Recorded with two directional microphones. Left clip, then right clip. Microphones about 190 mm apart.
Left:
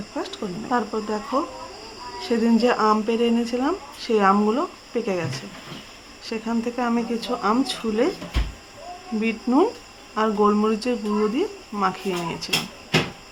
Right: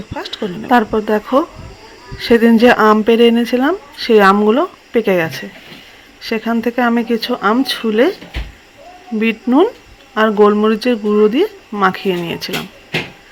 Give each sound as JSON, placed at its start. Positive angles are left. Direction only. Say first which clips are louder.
{"t": 0.2, "sound": "speech", "louder": "right 7 dB", "side_deg": -30}
{"t": 9.2, "sound": "speech", "louder": "right 8 dB", "side_deg": -25}